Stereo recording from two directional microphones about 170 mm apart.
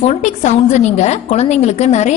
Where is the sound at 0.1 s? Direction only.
45° left (ahead or behind).